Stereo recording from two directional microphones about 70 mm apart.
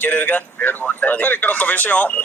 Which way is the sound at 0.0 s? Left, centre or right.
Left.